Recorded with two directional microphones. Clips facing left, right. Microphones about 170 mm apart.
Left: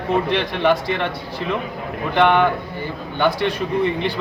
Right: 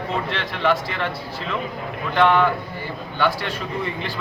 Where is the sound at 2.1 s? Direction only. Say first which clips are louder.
Left 2 dB; 20° left (ahead or behind).